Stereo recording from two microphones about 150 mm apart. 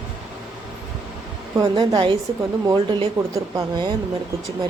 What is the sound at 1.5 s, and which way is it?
Speech, 25° right (ahead or behind).